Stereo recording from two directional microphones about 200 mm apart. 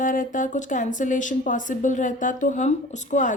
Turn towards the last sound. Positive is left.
turn(degrees=35)  # may be behind; listen again after turning